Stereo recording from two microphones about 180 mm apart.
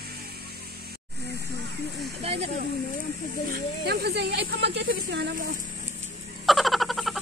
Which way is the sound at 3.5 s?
65° right (ahead or behind).